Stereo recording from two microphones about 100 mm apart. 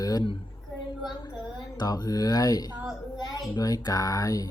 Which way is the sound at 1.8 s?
45° left (ahead or behind).